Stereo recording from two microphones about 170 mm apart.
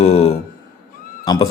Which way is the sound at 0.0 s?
40° left (ahead or behind).